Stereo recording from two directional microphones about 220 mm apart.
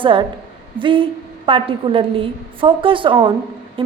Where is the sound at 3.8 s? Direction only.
25° right (ahead or behind).